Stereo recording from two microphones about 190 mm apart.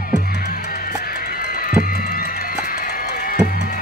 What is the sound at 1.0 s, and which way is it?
Run, 50° left (ahead or behind).